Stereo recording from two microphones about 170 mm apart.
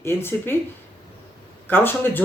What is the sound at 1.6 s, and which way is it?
Speech, 10° left (ahead or behind).